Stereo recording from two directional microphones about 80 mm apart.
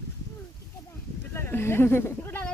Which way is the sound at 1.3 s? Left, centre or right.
Left.